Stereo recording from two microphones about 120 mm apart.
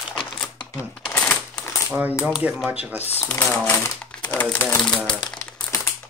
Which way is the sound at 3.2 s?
20° left (ahead or behind).